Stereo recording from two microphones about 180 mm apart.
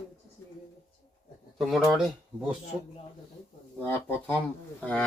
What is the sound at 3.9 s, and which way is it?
Speech, 10° left (ahead or behind).